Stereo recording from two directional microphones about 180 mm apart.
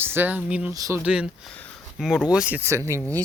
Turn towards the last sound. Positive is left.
turn(degrees=-15)  # may be behind; listen again after turning